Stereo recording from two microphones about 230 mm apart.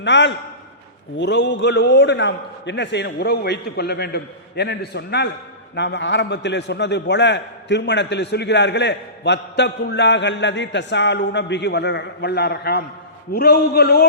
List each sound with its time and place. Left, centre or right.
0.0 s a man's voice: left